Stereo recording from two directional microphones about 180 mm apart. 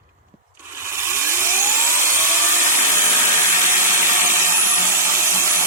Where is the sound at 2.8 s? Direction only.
45° right (ahead or behind).